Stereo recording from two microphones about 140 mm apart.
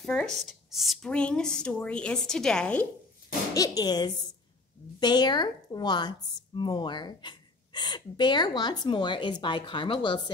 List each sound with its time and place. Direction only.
0.0 s speech: 5° left (ahead or behind)
3.5 s a woman's voice: 25° left (ahead or behind)